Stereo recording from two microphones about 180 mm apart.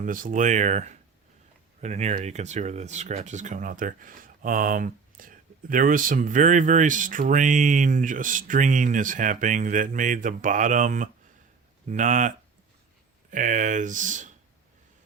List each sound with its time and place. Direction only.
0.0 s speech: 50° right (ahead or behind)
13.3 s speech: 45° right (ahead or behind)